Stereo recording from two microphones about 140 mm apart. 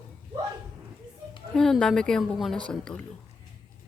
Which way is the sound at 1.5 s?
5° left (ahead or behind).